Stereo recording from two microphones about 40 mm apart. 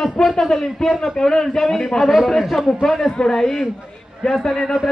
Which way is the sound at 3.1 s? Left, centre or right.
Centre.